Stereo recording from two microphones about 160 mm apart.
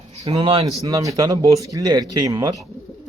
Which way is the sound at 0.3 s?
35° right (ahead or behind).